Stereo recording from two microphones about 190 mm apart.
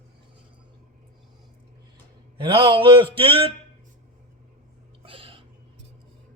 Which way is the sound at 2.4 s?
25° right (ahead or behind).